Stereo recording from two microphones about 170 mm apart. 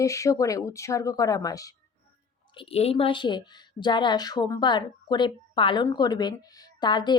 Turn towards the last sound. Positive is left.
turn(degrees=25)  # may be behind; listen again after turning